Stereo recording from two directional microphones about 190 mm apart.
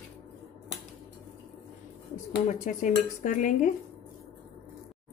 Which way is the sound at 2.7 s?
40° left (ahead or behind).